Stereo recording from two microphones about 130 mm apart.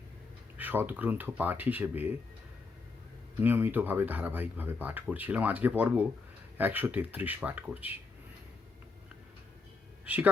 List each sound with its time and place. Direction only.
0.6 s speech: 15° right (ahead or behind)
3.4 s speech: 15° right (ahead or behind)